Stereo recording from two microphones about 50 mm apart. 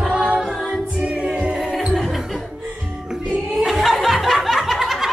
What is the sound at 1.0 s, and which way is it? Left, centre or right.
Music, right.